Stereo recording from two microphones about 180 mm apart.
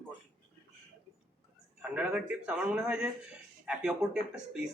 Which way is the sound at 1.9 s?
5° right (ahead or behind).